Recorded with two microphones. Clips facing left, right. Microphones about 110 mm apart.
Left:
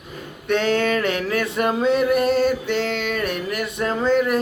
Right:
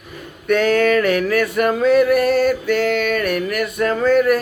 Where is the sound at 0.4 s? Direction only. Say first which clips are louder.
Right 4 dB; 25° left (ahead or behind).